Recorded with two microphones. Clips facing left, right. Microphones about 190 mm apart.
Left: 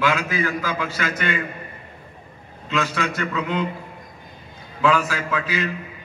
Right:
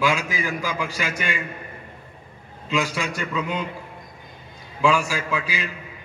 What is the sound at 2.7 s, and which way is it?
Speech, 10° right (ahead or behind).